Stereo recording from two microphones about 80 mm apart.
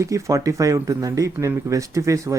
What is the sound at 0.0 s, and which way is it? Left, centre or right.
Speech, right.